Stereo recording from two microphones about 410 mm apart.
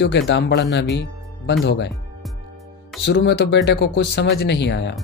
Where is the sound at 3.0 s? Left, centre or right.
Left.